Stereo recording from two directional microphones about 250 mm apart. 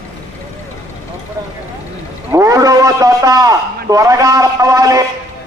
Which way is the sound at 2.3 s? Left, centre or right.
Centre.